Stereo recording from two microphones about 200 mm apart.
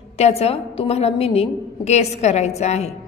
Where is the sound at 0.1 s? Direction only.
30° left (ahead or behind).